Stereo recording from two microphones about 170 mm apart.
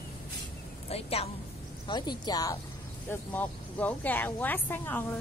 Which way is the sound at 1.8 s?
25° left (ahead or behind).